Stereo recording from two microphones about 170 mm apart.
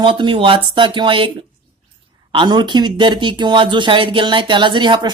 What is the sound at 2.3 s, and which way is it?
Speech, 25° right (ahead or behind).